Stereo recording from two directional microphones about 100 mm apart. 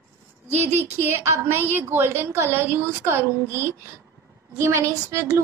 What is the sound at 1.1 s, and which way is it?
A woman's voice, 25° right (ahead or behind).